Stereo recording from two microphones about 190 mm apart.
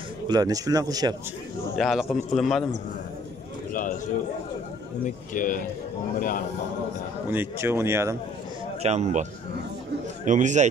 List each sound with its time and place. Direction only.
0.3 s speech: 20° right (ahead or behind)
1.8 s speech: centre (ahead or behind)
3.7 s speech: 45° left (ahead or behind)
5.0 s speech: 45° left (ahead or behind)
7.2 s speech: 15° right (ahead or behind)
8.8 s speech: 35° right (ahead or behind)